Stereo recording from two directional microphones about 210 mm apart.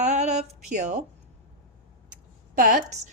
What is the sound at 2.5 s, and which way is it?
Speech, 40° right (ahead or behind).